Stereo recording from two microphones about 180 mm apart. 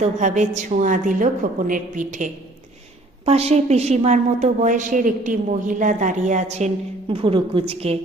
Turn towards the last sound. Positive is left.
turn(degrees=-35)  # may be behind; listen again after turning